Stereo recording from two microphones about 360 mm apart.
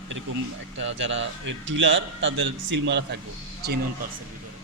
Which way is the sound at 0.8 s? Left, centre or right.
Right.